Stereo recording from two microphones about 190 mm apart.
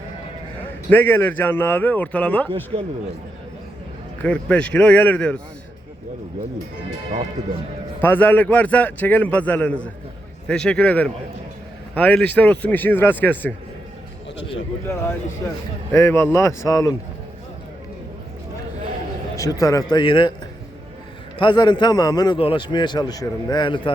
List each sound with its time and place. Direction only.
0.9 s a man's voice: 10° left (ahead or behind)
2.7 s a man's voice: 35° right (ahead or behind)
4.2 s a man's voice: 5° left (ahead or behind)
8.0 s a man's voice: 10° left (ahead or behind)
15.9 s a man's voice: 15° left (ahead or behind)
19.4 s a man's voice: 20° left (ahead or behind)
21.3 s a man's voice: 25° left (ahead or behind)